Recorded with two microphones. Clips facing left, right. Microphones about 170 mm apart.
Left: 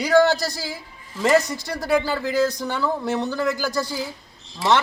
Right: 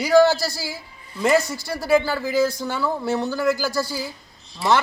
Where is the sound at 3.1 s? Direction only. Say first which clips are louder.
Right 1 dB; 20° left (ahead or behind).